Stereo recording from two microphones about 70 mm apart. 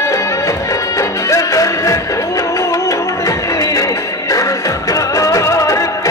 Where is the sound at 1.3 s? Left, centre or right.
Left.